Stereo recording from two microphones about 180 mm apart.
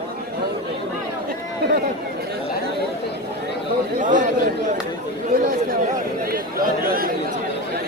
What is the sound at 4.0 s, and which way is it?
Chatter, 45° right (ahead or behind).